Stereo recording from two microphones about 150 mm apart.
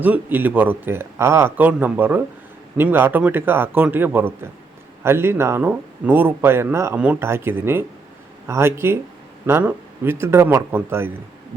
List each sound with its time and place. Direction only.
0.0 s speech: 10° right (ahead or behind)